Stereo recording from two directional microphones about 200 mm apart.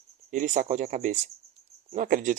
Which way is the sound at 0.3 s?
40° right (ahead or behind).